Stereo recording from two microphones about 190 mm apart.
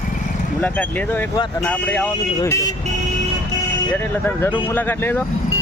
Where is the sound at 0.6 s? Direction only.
10° left (ahead or behind).